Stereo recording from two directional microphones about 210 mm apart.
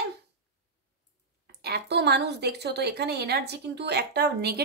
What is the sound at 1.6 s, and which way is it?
A woman's voice, 50° right (ahead or behind).